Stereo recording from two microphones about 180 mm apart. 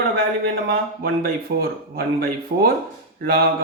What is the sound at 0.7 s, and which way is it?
Speech, 55° right (ahead or behind).